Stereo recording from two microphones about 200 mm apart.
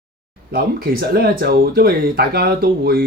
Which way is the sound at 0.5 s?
50° right (ahead or behind).